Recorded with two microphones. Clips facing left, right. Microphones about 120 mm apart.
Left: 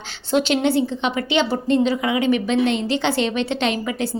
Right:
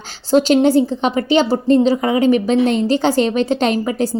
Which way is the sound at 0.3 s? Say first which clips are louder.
Right 6 dB; 40° right (ahead or behind).